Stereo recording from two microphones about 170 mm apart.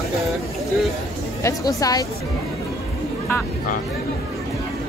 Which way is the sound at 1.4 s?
20° left (ahead or behind).